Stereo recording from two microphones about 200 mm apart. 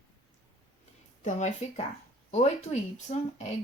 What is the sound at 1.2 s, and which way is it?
Speech, 35° left (ahead or behind).